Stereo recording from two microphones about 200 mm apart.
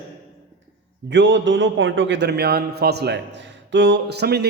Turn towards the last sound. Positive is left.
turn(degrees=-55)  # may be behind; listen again after turning